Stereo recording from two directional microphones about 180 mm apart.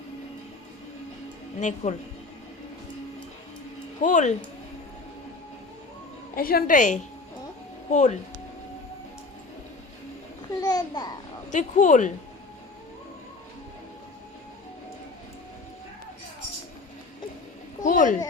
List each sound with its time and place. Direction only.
1.5 s speech: 40° left (ahead or behind)
4.0 s a woman's voice: 45° left (ahead or behind)
6.3 s a woman's voice: 55° left (ahead or behind)
10.6 s babbling: 20° left (ahead or behind)
11.5 s a woman's voice: 45° left (ahead or behind)
17.8 s a sound: 45° left (ahead or behind)